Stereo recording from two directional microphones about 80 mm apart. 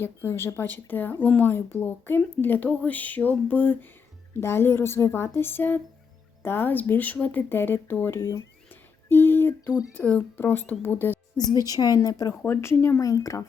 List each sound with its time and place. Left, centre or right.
0.0 s speech: left
4.4 s a woman's voice: left
11.6 s a woman's voice: left
12.5 s a woman's voice: left
13.0 s a woman's voice: left